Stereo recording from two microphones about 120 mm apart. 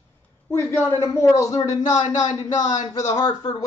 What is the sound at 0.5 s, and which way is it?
Speech, 25° left (ahead or behind).